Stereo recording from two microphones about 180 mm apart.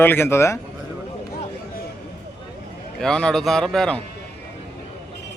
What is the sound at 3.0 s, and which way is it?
A man's voice, 5° left (ahead or behind).